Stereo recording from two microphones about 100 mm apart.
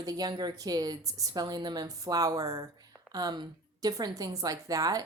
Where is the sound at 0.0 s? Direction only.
40° right (ahead or behind).